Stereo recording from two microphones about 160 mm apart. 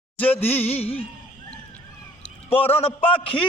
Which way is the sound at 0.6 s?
40° left (ahead or behind).